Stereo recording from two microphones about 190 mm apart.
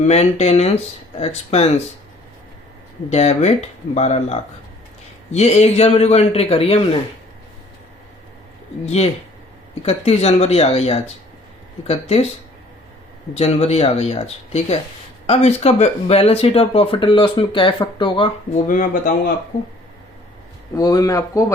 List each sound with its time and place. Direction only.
0.0 s speech: 35° left (ahead or behind)
3.1 s speech: 35° left (ahead or behind)
9.8 s speech: 35° left (ahead or behind)
13.3 s speech: 35° left (ahead or behind)
18.7 s speech: 45° left (ahead or behind)
20.7 s speech: 20° left (ahead or behind)